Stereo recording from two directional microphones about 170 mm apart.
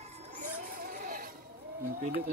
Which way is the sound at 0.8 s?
55° right (ahead or behind).